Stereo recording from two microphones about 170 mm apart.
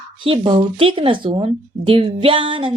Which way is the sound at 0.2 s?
30° right (ahead or behind).